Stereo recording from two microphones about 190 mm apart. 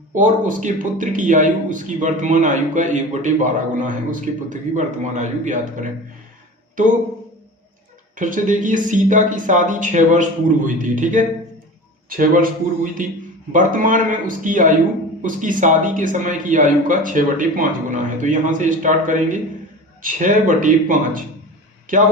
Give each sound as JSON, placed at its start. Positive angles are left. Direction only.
{"t": 0.1, "sound": "a man's voice", "side_deg": -45}
{"t": 8.1, "sound": "a man's voice", "side_deg": -40}